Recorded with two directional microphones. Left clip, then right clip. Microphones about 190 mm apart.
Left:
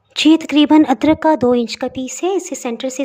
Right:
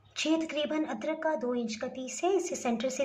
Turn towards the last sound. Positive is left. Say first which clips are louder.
# left 9 dB
turn(degrees=50)  # may be behind; listen again after turning